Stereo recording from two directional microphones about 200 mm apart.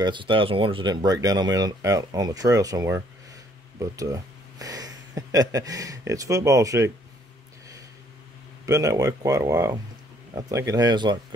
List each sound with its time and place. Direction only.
0.0 s speech: 25° right (ahead or behind)
8.6 s speech: 15° right (ahead or behind)